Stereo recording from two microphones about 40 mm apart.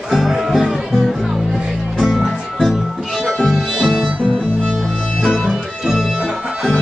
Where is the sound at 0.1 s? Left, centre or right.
Centre.